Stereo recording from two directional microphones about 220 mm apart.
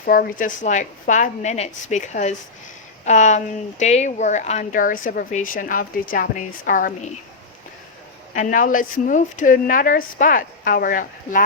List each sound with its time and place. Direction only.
0.0 s a woman's voice: 40° left (ahead or behind)
8.3 s a woman's voice: 35° left (ahead or behind)